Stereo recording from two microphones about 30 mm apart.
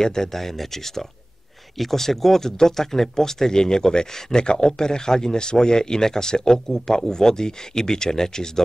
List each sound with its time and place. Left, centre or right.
0.0 s speech: centre
0.4 s speech: centre